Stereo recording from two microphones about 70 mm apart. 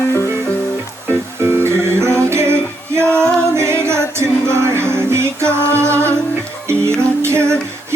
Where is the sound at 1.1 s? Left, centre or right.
Right.